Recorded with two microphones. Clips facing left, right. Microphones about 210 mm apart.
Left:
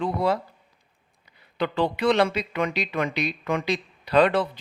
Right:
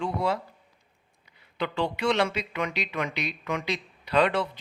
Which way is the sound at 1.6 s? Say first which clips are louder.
Left 4 dB; 35° left (ahead or behind).